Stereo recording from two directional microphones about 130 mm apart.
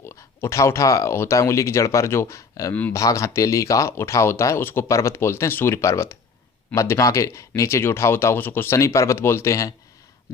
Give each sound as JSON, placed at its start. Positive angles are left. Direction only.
{"t": 0.0, "sound": "speech", "side_deg": 20}